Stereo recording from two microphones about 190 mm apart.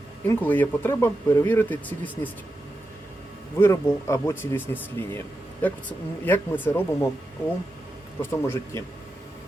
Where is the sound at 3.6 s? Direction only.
15° left (ahead or behind).